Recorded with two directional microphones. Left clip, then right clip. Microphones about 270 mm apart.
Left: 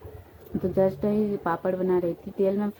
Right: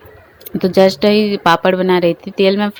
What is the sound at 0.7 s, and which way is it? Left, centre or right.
Speech, right.